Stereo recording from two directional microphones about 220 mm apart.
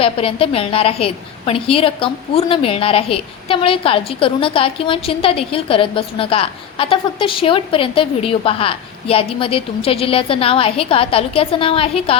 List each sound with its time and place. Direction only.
0.0 s a woman's voice: 25° left (ahead or behind)